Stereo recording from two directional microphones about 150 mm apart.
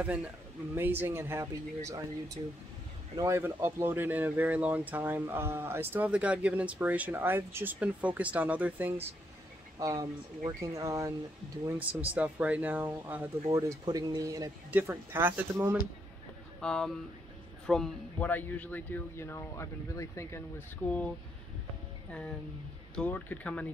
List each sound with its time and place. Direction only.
0.0 s speech: 10° right (ahead or behind)
9.8 s speech: 20° right (ahead or behind)
11.8 s speech: 10° right (ahead or behind)
13.5 s speech: 25° right (ahead or behind)
16.6 s speech: 5° left (ahead or behind)
22.9 s speech: 10° left (ahead or behind)